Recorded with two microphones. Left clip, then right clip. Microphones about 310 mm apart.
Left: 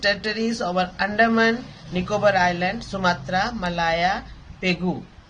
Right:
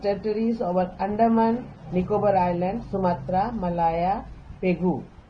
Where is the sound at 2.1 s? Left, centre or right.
Left.